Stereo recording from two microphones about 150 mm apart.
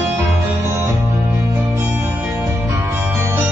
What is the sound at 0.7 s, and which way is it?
Music, 20° right (ahead or behind).